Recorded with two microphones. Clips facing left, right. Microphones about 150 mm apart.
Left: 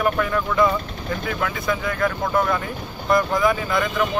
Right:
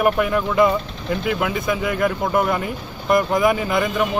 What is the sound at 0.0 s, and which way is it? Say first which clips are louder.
Speech: right 3 dB; 15° right (ahead or behind).